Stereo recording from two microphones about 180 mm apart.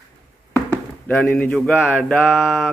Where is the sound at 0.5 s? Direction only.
10° left (ahead or behind).